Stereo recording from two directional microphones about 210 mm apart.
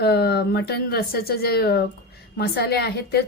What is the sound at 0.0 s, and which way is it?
A woman's voice, 50° left (ahead or behind).